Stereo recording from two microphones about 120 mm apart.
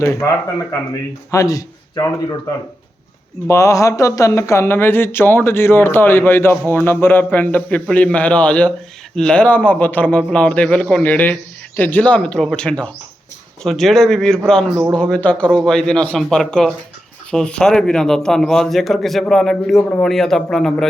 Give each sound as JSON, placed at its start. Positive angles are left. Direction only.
{"t": 0.0, "sound": "speech", "side_deg": 25}
{"t": 3.4, "sound": "a man's voice", "side_deg": 25}